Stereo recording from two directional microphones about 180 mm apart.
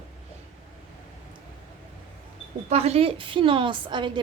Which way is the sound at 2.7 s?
35° right (ahead or behind).